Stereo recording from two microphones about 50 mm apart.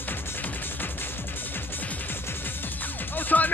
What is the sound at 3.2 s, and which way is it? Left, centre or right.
Music, left.